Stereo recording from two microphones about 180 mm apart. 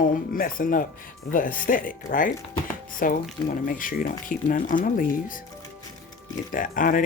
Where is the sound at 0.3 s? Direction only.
50° left (ahead or behind).